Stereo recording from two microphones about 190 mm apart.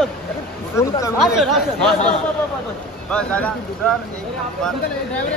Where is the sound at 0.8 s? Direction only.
15° left (ahead or behind).